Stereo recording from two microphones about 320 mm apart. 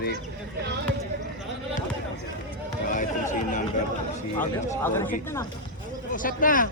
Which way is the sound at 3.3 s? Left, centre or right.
Left.